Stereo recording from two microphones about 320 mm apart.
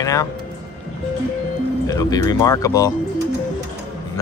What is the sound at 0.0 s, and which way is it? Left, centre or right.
Speech, centre.